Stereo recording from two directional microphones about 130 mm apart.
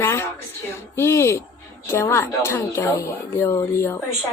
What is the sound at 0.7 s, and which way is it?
Speech, 20° left (ahead or behind).